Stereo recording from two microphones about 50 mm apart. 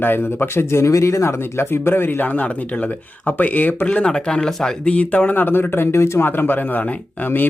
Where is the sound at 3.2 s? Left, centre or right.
Left.